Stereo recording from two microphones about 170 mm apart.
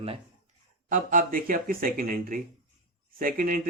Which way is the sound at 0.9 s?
50° right (ahead or behind).